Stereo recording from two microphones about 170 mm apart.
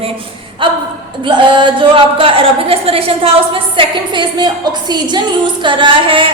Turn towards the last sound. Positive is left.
turn(degrees=-30)  # may be behind; listen again after turning